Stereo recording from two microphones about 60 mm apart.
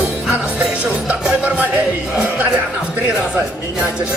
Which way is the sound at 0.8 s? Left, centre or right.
Right.